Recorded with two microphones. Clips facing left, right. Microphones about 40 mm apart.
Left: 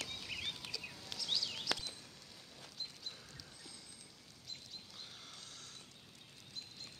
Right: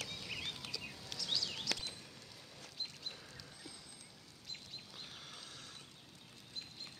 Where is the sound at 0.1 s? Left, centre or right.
Centre.